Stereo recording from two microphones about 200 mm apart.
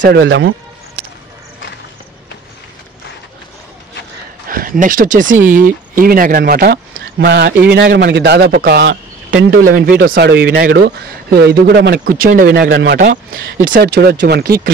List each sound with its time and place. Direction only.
0.0 s speech: 60° right (ahead or behind)
4.5 s speech: 45° right (ahead or behind)
6.9 s a sound: 70° right (ahead or behind)
7.7 s speech: 55° right (ahead or behind)
9.8 s speech: 45° right (ahead or behind)